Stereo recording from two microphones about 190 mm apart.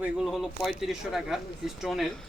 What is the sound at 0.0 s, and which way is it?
Speech, 5° right (ahead or behind).